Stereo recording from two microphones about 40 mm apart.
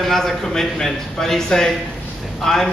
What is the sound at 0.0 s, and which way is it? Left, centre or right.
A man's voice, centre.